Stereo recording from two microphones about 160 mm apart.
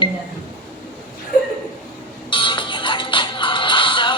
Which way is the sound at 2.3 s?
30° left (ahead or behind).